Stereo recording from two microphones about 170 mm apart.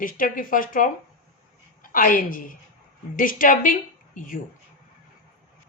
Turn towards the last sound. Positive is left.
turn(degrees=55)  # may be behind; listen again after turning